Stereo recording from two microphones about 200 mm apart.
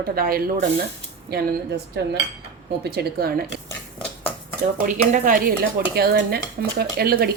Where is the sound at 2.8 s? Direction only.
50° right (ahead or behind).